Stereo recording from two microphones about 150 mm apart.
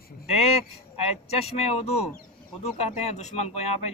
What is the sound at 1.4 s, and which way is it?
A man's voice, 45° left (ahead or behind).